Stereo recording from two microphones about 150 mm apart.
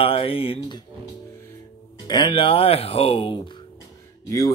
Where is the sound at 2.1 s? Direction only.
30° left (ahead or behind).